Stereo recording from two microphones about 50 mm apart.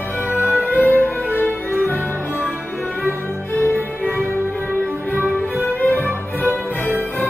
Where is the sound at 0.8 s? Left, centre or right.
Left.